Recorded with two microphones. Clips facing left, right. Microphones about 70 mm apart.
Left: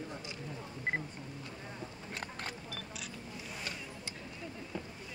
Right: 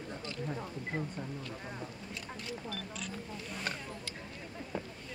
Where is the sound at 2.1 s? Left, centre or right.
Left.